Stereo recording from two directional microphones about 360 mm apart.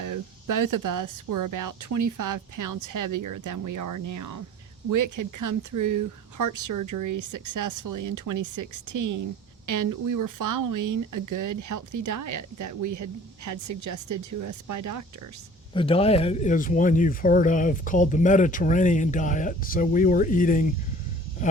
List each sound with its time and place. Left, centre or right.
0.0 s speech: right
15.7 s speech: centre